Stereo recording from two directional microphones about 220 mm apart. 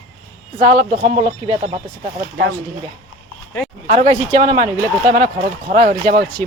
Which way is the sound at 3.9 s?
30° right (ahead or behind).